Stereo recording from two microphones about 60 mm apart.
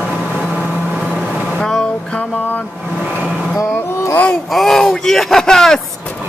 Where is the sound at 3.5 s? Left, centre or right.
Left.